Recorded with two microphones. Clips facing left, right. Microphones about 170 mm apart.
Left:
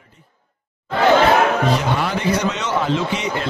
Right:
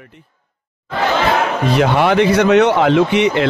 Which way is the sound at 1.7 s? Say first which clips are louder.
Right 8 dB; 70° right (ahead or behind).